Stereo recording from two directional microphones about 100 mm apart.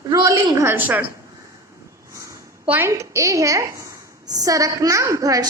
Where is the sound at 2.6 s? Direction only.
20° right (ahead or behind).